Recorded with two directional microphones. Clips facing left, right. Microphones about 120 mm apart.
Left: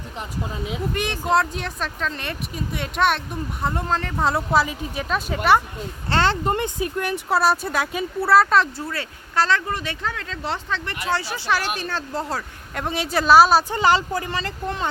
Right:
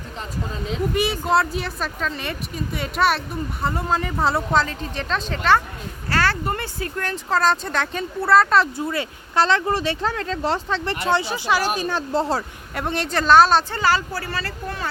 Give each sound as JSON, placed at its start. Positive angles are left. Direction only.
{"t": 0.9, "sound": "speech", "side_deg": -5}
{"t": 6.1, "sound": "speech", "side_deg": 25}
{"t": 8.8, "sound": "speech", "side_deg": -20}
{"t": 12.1, "sound": "speech", "side_deg": -30}
{"t": 12.7, "sound": "speech", "side_deg": 0}
{"t": 13.7, "sound": "speech", "side_deg": 20}